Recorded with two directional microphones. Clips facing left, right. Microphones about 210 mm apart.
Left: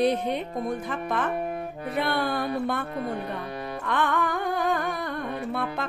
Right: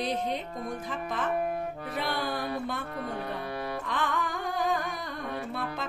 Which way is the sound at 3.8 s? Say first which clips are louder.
Left 10 dB; 60° left (ahead or behind).